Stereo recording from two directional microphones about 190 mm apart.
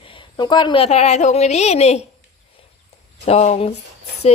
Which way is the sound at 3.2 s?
35° left (ahead or behind).